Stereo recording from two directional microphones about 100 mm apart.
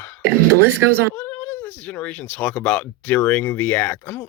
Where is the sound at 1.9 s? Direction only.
15° left (ahead or behind).